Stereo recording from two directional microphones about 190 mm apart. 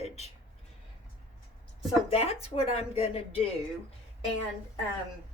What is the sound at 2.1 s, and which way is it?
Speech, 30° left (ahead or behind).